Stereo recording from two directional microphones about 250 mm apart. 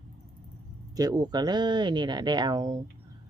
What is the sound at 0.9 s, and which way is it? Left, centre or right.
Speech, centre.